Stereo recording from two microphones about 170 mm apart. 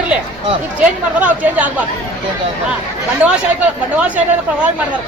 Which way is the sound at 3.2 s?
5° right (ahead or behind).